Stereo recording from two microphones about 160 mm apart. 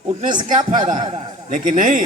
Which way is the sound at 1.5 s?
55° right (ahead or behind).